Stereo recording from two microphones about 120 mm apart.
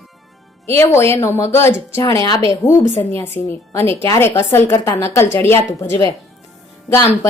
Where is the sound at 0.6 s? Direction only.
20° left (ahead or behind).